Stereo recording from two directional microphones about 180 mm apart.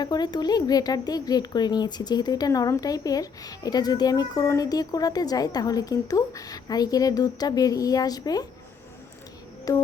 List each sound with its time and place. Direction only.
0.0 s speech: 25° left (ahead or behind)
9.7 s speech: 20° left (ahead or behind)